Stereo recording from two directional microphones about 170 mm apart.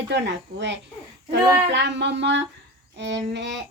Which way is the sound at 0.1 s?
90° right.